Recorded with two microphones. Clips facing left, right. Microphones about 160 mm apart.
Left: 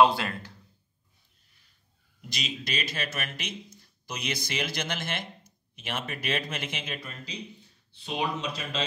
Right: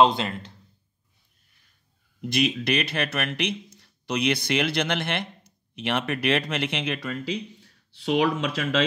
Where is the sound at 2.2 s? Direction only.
55° right (ahead or behind).